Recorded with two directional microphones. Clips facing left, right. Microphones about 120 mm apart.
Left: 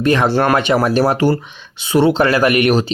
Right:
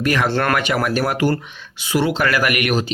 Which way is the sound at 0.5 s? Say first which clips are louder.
Left 5 dB; 25° left (ahead or behind).